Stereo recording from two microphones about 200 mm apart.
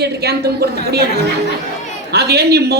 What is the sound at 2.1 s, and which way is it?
Speech, 55° right (ahead or behind).